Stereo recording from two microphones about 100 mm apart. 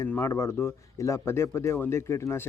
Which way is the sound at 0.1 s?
25° left (ahead or behind).